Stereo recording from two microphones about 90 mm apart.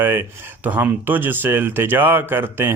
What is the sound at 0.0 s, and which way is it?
Speech, 25° right (ahead or behind).